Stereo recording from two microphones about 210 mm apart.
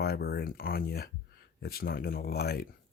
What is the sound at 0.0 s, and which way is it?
Speech, 45° left (ahead or behind).